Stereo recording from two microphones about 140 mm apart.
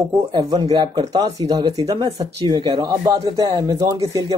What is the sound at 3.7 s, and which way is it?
Speech, 25° right (ahead or behind).